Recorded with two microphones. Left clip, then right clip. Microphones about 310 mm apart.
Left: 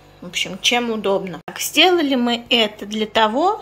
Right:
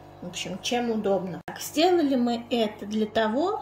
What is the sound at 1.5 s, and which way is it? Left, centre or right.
A woman's voice, left.